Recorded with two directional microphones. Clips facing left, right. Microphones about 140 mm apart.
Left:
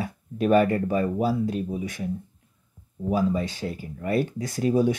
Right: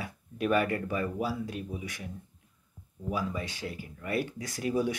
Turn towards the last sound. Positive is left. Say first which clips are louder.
# left 8 dB
turn(degrees=30)  # may be behind; listen again after turning